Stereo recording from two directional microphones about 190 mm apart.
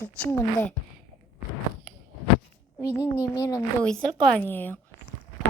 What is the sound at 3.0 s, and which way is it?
Speech, 15° left (ahead or behind).